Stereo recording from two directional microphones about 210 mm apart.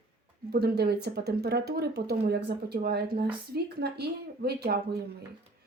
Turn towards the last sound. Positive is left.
turn(degrees=-50)  # may be behind; listen again after turning